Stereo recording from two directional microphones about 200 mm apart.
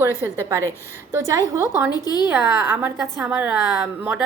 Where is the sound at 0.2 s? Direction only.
10° right (ahead or behind).